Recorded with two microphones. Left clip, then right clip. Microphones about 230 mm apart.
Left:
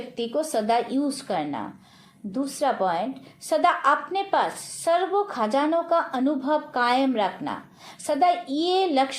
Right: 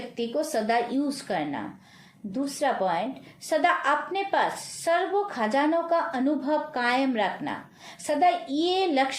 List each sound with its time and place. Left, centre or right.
0.2 s a woman's voice: centre